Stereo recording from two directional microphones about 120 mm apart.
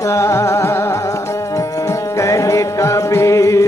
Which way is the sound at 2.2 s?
25° left (ahead or behind).